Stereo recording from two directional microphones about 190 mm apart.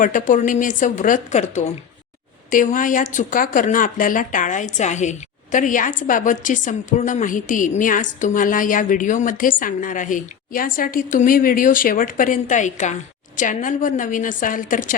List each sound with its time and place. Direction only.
0.0 s speech: 45° left (ahead or behind)